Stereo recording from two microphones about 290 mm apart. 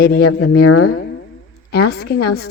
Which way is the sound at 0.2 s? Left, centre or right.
Left.